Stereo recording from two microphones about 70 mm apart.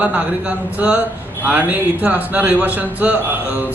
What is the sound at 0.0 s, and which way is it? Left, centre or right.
Speech, centre.